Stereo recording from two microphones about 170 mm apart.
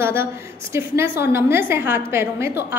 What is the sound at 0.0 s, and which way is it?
A woman's voice, 15° right (ahead or behind).